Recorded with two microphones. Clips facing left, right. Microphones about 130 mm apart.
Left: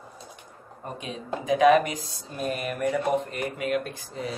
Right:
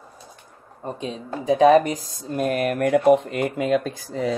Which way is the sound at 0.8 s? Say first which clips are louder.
Right 4 dB; 30° right (ahead or behind).